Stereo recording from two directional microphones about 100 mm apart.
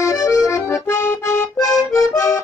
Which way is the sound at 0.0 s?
35° left (ahead or behind).